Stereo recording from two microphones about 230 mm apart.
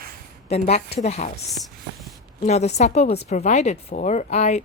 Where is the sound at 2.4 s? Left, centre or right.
Left.